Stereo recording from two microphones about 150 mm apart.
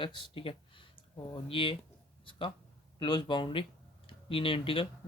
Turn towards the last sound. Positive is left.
turn(degrees=35)  # may be behind; listen again after turning